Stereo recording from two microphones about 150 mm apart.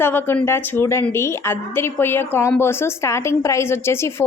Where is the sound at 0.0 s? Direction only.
15° left (ahead or behind).